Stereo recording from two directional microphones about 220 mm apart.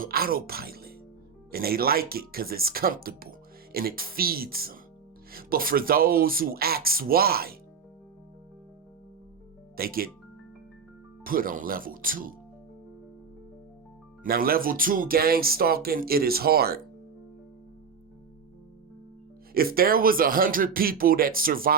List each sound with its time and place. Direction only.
0.0 s speech: 40° right (ahead or behind)
9.7 s speech: 40° right (ahead or behind)
11.2 s speech: 40° right (ahead or behind)
14.3 s speech: 40° right (ahead or behind)
19.5 s speech: 40° right (ahead or behind)